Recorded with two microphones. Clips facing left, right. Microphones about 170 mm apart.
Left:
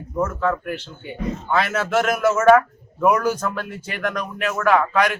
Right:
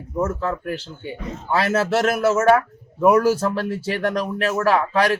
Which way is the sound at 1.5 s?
35° right (ahead or behind).